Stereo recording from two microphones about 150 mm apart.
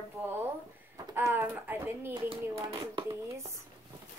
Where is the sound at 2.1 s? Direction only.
25° right (ahead or behind).